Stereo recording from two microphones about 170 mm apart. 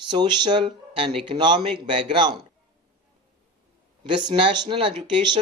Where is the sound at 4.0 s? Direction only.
25° right (ahead or behind).